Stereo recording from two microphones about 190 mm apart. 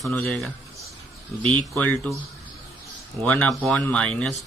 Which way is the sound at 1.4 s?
25° right (ahead or behind).